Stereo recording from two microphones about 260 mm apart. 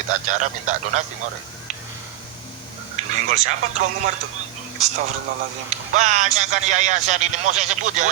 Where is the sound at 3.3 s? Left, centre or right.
Right.